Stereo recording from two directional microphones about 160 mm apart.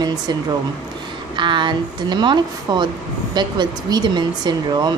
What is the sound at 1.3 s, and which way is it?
Speech, 30° right (ahead or behind).